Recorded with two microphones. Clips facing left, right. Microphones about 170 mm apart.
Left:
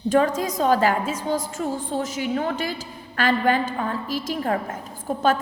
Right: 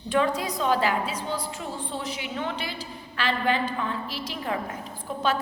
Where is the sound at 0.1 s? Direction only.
45° left (ahead or behind).